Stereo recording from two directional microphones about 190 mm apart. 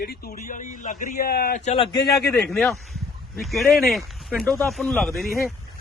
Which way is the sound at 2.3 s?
5° left (ahead or behind).